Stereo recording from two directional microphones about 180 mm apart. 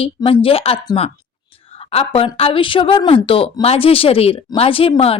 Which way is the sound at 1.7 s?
35° left (ahead or behind).